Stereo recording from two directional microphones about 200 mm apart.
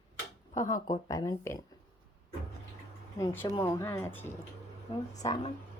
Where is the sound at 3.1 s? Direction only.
10° left (ahead or behind).